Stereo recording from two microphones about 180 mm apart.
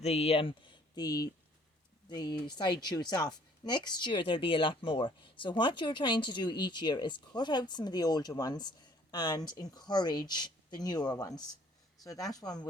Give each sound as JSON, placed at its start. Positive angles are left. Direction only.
{"t": 0.0, "sound": "speech", "side_deg": 35}